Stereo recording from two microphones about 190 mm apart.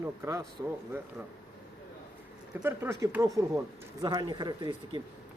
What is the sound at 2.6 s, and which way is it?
Speech, 15° right (ahead or behind).